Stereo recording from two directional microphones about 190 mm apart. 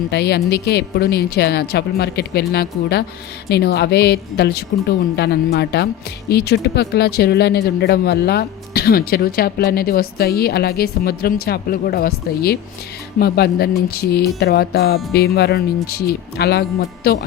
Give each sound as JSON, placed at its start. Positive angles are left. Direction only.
{"t": 0.1, "sound": "a woman's voice", "side_deg": 60}